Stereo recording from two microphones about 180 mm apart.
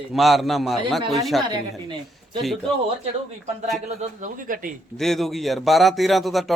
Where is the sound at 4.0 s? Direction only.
45° right (ahead or behind).